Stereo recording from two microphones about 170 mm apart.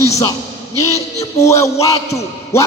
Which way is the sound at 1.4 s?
15° left (ahead or behind).